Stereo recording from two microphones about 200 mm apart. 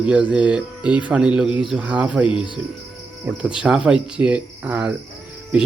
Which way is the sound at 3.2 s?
5° right (ahead or behind).